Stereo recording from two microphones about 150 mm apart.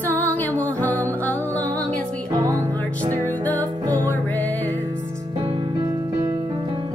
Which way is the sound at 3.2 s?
10° left (ahead or behind).